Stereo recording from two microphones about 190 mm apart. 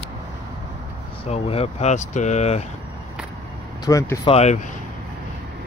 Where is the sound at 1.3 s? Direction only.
30° left (ahead or behind).